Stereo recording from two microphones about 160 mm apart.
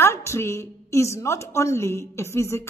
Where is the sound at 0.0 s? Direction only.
15° left (ahead or behind).